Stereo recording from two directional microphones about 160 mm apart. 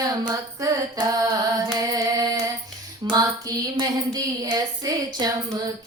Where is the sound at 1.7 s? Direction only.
25° right (ahead or behind).